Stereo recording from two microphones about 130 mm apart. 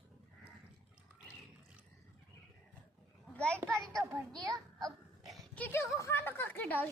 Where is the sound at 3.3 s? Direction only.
10° left (ahead or behind).